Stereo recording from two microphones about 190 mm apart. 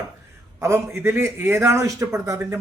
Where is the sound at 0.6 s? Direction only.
15° right (ahead or behind).